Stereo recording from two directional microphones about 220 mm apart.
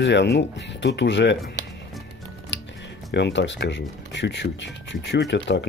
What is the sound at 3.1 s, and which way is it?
Speech, 55° left (ahead or behind).